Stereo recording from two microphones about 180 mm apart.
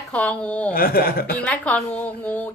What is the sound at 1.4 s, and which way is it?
Speech, 5° left (ahead or behind).